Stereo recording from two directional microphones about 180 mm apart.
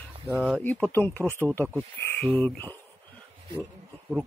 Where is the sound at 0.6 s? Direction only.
5° left (ahead or behind).